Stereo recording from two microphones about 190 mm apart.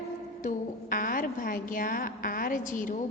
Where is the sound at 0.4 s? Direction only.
45° left (ahead or behind).